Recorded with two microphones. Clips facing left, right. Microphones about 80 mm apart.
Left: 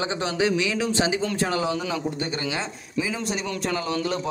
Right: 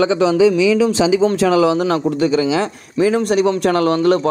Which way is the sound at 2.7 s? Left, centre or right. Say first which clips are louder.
Right 12 dB; right.